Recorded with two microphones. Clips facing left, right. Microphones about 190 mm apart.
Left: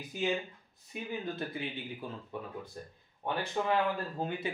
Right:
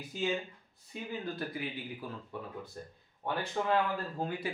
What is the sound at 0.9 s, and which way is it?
Speech, 25° left (ahead or behind).